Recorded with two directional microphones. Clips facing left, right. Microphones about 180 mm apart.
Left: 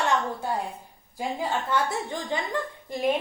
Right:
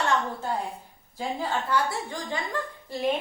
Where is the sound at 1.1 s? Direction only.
20° left (ahead or behind).